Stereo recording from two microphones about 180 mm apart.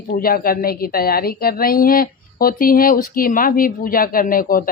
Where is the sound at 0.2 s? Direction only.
55° left (ahead or behind).